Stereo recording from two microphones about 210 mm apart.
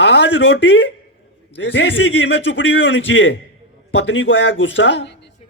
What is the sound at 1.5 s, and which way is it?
A man's voice, 60° left (ahead or behind).